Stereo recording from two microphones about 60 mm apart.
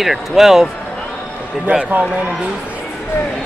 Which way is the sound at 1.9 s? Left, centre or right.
Right.